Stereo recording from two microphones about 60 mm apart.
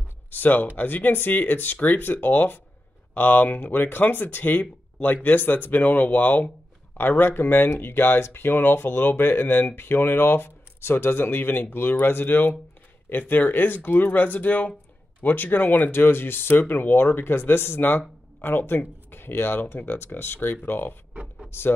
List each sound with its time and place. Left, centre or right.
0.3 s speech: left
21.1 s a sound: right
21.5 s speech: left